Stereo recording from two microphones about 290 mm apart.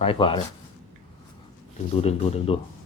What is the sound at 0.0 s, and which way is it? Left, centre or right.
Speech, centre.